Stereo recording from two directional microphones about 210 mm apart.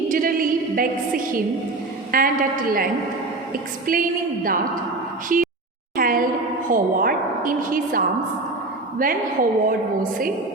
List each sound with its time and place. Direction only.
0.1 s a sound: 40° right (ahead or behind)
2.1 s a woman's voice: 45° right (ahead or behind)
3.9 s a woman's voice: 40° right (ahead or behind)
5.3 s a woman's voice: 40° right (ahead or behind)
6.0 s a sound: 45° right (ahead or behind)
6.7 s a woman's voice: 40° right (ahead or behind)